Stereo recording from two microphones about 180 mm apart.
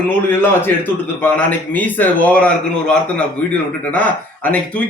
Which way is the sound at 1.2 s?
10° left (ahead or behind).